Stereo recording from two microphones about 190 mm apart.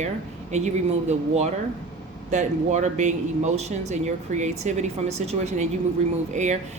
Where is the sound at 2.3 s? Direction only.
40° right (ahead or behind).